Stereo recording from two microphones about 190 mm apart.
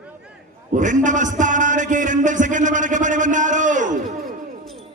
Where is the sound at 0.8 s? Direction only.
40° right (ahead or behind).